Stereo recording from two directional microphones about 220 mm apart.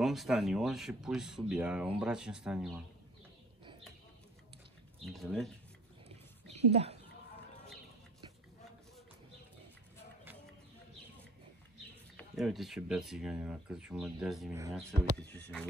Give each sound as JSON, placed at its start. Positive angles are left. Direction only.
{"t": 0.0, "sound": "speech", "side_deg": 0}
{"t": 5.0, "sound": "speech", "side_deg": 0}
{"t": 6.0, "sound": "a sound", "side_deg": -30}
{"t": 6.7, "sound": "speech", "side_deg": -30}
{"t": 12.2, "sound": "speech", "side_deg": 0}